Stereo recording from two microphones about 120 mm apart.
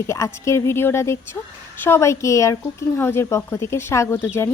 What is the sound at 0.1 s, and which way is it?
A woman's voice, 25° left (ahead or behind).